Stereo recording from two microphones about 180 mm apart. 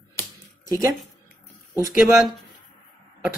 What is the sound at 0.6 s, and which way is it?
Speech, 20° right (ahead or behind).